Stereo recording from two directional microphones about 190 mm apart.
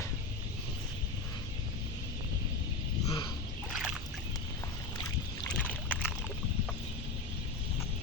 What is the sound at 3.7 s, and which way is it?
Boat, 5° right (ahead or behind).